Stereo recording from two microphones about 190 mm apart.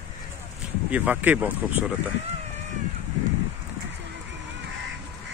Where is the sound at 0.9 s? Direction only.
5° right (ahead or behind).